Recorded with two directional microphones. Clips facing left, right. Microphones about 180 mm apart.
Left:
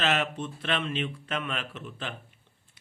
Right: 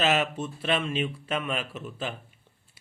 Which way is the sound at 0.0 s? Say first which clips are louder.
Right 3 dB; 10° right (ahead or behind).